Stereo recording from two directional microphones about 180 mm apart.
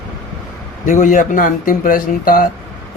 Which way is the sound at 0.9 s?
45° left (ahead or behind).